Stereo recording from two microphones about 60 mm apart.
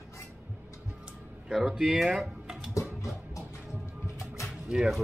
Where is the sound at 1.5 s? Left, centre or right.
Centre.